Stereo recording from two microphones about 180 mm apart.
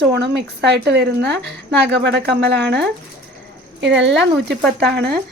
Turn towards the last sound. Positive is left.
turn(degrees=-65)  # may be behind; listen again after turning